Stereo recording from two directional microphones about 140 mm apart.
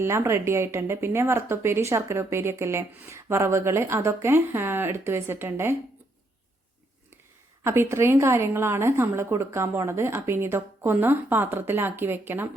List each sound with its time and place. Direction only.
0.0 s speech: 20° right (ahead or behind)
7.6 s a woman's voice: 20° right (ahead or behind)